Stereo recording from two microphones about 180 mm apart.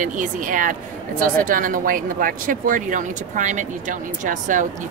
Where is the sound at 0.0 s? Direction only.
45° right (ahead or behind).